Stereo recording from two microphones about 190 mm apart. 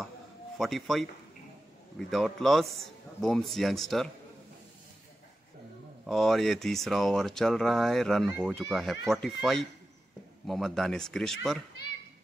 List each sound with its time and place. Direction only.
0.6 s speech: centre (ahead or behind)
6.0 s speech: centre (ahead or behind)